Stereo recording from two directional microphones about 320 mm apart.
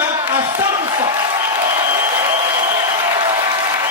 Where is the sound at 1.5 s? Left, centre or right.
Centre.